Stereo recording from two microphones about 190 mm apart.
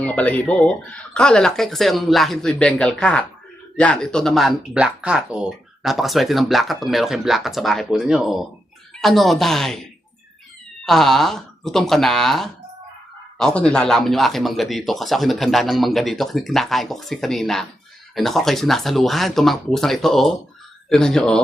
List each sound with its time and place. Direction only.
0.0 s speech: 5° left (ahead or behind)
10.8 s speech: centre (ahead or behind)